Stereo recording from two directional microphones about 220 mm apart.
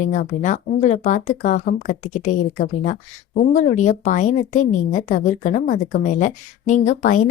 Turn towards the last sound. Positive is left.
turn(degrees=35)  # may be behind; listen again after turning